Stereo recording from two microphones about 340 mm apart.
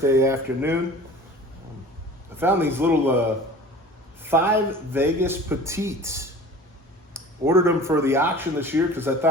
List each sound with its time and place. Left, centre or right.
0.0 s speech: centre
2.4 s speech: centre
4.2 s speech: centre